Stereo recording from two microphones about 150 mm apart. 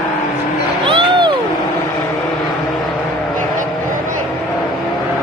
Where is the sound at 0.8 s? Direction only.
35° right (ahead or behind).